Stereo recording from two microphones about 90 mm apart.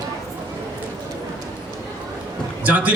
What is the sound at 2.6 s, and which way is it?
Speech, 15° right (ahead or behind).